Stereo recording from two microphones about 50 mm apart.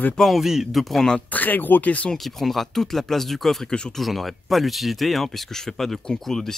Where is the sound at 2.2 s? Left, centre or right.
Centre.